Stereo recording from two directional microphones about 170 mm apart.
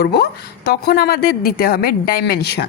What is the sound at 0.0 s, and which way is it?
A woman's voice, 70° left (ahead or behind).